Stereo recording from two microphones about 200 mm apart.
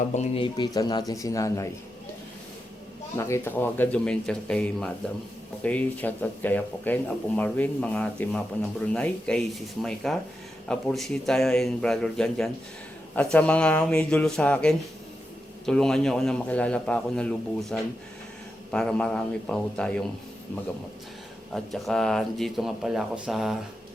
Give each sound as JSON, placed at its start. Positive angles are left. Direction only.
{"t": 0.0, "sound": "speech", "side_deg": 35}
{"t": 3.2, "sound": "a man's voice", "side_deg": 15}
{"t": 21.5, "sound": "a man's voice", "side_deg": 0}